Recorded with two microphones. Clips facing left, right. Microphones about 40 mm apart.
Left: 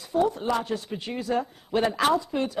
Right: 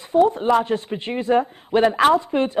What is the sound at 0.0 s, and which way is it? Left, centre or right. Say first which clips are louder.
A woman's voice: right 7 dB; right.